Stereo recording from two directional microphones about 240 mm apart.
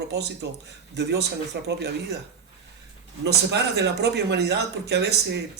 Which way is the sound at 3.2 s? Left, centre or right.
Right.